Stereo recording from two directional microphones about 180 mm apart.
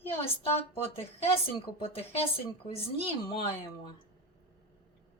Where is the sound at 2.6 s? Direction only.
30° left (ahead or behind).